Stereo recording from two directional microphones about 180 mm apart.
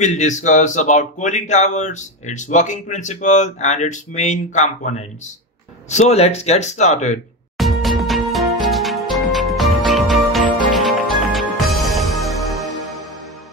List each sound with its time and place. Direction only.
0.0 s speech: 40° left (ahead or behind)
7.5 s music: centre (ahead or behind)